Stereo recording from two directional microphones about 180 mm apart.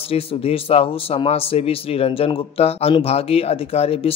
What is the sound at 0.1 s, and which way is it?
A man's voice, 35° left (ahead or behind).